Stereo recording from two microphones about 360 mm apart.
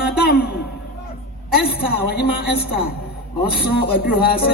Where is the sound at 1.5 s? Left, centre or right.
Left.